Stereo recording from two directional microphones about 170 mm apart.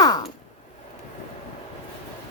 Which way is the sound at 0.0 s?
20° left (ahead or behind).